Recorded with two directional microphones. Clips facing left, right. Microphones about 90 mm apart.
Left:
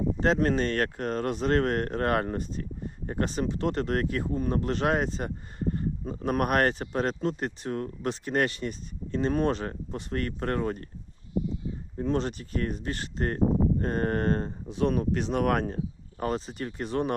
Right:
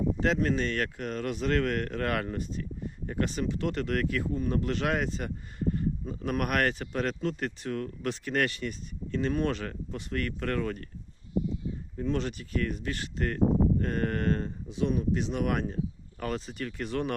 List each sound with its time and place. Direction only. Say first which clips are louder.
0.3 s speech: left 3 dB; 45° left (ahead or behind)
11.9 s speech: left 3 dB; 35° left (ahead or behind)
16.2 s speech: left 3 dB; 30° left (ahead or behind)